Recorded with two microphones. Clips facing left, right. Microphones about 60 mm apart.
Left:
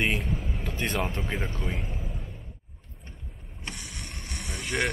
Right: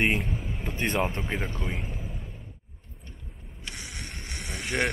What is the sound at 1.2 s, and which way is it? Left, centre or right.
Speech, centre.